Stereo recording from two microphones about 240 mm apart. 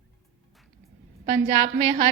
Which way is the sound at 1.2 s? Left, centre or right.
Centre.